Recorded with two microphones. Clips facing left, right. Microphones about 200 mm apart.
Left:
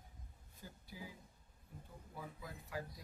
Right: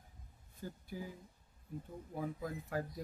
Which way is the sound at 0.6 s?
50° right (ahead or behind).